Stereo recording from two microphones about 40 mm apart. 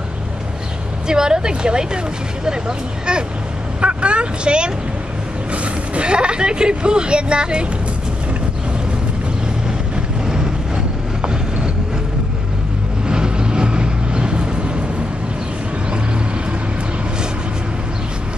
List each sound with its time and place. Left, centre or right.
1.0 s speech: centre
3.8 s speech: right
10.2 s vehicle: centre
13.1 s vehicle: right